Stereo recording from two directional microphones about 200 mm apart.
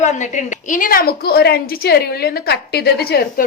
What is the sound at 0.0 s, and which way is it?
A woman's voice, 35° left (ahead or behind).